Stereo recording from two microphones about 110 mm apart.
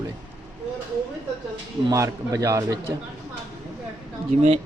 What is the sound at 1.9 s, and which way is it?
Speech, 30° right (ahead or behind).